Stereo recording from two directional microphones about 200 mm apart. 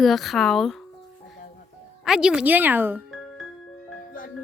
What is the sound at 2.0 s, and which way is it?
Speech, centre (ahead or behind).